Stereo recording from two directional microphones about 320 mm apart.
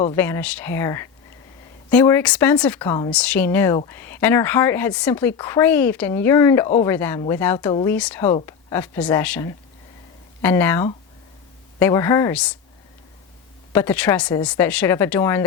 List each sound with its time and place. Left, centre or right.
0.0 s speech: centre
13.7 s speech: centre